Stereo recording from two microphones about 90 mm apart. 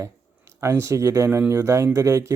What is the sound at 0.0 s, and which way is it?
Speech, 30° right (ahead or behind).